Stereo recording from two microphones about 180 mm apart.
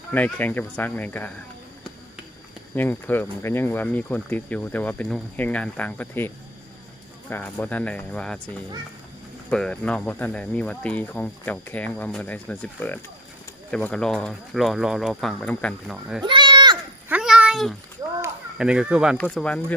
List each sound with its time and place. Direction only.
0.1 s speech: 10° left (ahead or behind)
2.7 s speech: 10° left (ahead or behind)
9.5 s speech: 5° left (ahead or behind)
16.2 s a sound: 25° right (ahead or behind)
17.1 s babbling: 5° right (ahead or behind)
18.5 s speech: 5° right (ahead or behind)
19.1 s speech: 5° left (ahead or behind)